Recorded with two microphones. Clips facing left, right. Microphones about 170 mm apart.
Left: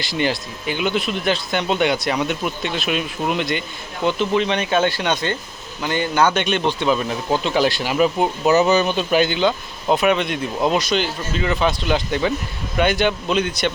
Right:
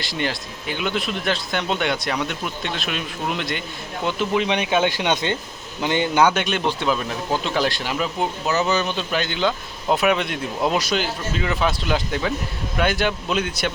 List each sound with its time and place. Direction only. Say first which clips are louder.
0.0 s speech: left 4 dB; centre (ahead or behind)